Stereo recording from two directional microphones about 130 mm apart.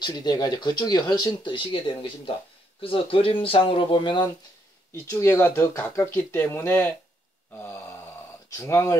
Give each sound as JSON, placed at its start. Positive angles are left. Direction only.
{"t": 0.0, "sound": "speech", "side_deg": 30}
{"t": 4.9, "sound": "speech", "side_deg": 25}
{"t": 7.5, "sound": "a sound", "side_deg": 15}
{"t": 8.5, "sound": "speech", "side_deg": 20}